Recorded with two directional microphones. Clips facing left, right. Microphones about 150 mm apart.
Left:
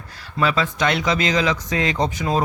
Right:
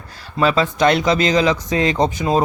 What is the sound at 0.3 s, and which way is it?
Speech, 30° right (ahead or behind).